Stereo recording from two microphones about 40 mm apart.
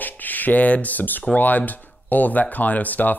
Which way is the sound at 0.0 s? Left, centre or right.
Left.